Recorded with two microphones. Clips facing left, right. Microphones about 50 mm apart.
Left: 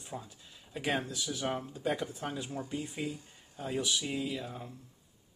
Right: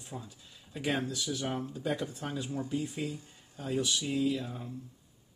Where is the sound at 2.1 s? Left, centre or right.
Centre.